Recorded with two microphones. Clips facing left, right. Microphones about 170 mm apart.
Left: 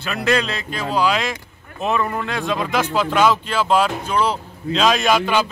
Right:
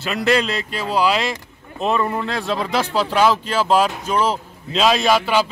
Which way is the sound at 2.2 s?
35° right (ahead or behind).